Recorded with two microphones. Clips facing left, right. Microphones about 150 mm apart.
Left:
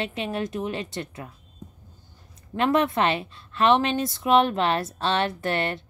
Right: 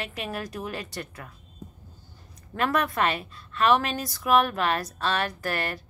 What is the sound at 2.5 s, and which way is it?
A woman's voice, 25° left (ahead or behind).